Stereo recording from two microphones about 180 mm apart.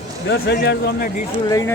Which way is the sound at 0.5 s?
65° left (ahead or behind).